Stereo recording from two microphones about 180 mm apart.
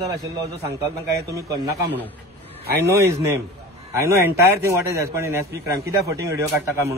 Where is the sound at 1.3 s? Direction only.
20° right (ahead or behind).